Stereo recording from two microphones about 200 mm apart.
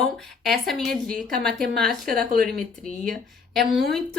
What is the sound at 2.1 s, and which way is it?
Speech, 45° right (ahead or behind).